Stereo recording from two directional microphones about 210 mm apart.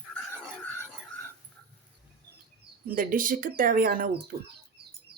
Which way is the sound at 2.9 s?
40° right (ahead or behind).